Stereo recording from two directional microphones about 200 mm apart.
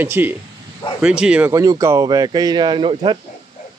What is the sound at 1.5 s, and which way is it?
Speech, 15° right (ahead or behind).